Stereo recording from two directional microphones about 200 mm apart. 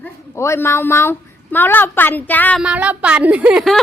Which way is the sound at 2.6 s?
5° right (ahead or behind).